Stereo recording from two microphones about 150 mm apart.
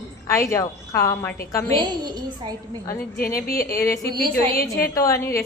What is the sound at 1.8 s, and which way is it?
Speech, 30° right (ahead or behind).